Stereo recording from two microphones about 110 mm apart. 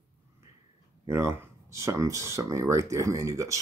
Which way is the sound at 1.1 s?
25° right (ahead or behind).